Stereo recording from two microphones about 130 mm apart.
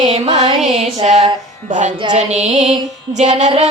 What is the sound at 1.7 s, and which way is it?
Speech, 70° right (ahead or behind).